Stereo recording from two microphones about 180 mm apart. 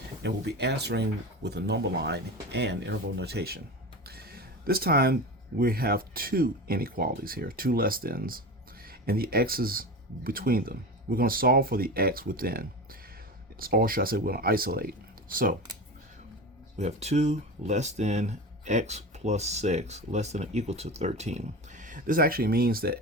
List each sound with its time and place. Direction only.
0.2 s speech: 70° right (ahead or behind); by 15.5 s 50° right (ahead or behind)
16.7 s speech: 35° right (ahead or behind); by 23.0 s 55° right (ahead or behind)